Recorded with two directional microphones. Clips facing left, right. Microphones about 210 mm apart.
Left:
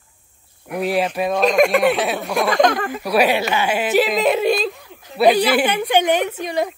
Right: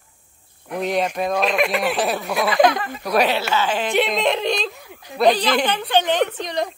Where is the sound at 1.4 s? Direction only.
45° left (ahead or behind).